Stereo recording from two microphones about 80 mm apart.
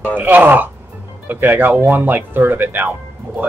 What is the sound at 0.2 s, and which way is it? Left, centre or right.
Speech, right.